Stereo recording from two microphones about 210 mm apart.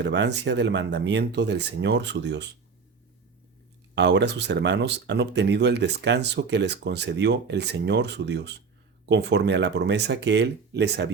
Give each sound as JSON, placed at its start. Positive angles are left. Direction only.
{"t": 0.0, "sound": "speech", "side_deg": -55}
{"t": 3.9, "sound": "speech", "side_deg": -55}